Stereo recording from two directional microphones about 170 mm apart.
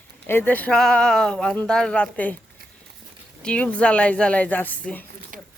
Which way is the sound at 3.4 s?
5° left (ahead or behind).